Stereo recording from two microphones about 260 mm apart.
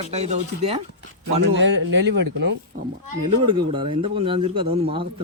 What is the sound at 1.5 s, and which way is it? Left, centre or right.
Speech, right.